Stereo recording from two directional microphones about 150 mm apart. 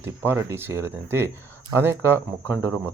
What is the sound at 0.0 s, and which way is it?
Speech, 15° right (ahead or behind).